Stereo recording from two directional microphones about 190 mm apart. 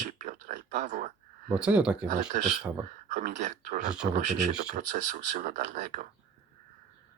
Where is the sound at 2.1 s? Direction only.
40° right (ahead or behind).